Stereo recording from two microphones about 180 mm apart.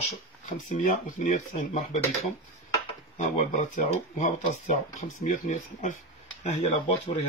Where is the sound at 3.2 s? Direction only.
45° left (ahead or behind).